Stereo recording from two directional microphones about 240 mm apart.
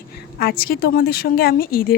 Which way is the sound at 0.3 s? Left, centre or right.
Left.